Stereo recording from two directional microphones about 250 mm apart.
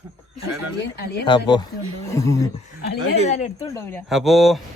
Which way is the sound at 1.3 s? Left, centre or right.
Centre.